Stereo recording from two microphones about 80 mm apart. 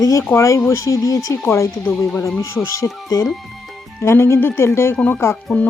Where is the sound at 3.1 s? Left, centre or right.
Left.